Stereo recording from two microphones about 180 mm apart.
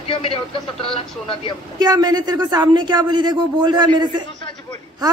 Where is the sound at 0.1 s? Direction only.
30° left (ahead or behind).